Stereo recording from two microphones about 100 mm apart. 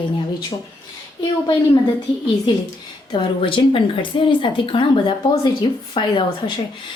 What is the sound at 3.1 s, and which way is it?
Speech, 60° left (ahead or behind).